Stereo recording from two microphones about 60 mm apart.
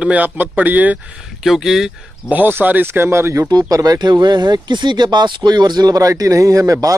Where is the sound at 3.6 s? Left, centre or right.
Right.